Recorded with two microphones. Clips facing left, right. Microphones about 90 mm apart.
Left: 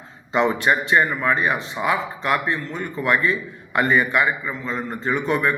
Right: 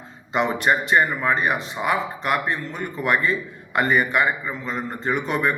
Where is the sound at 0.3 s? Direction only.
15° right (ahead or behind).